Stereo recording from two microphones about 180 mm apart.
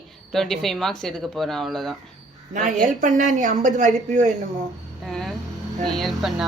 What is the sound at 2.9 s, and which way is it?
A woman's voice, 45° right (ahead or behind).